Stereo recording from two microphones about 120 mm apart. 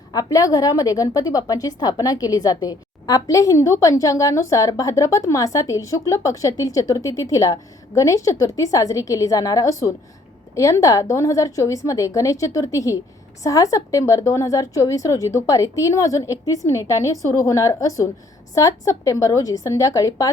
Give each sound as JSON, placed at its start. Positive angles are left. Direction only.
{"t": 0.1, "sound": "a woman's voice", "side_deg": 30}